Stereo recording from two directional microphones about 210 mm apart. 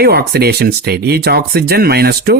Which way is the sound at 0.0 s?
50° right (ahead or behind).